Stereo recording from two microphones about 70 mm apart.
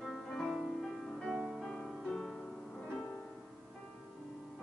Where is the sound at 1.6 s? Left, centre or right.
Centre.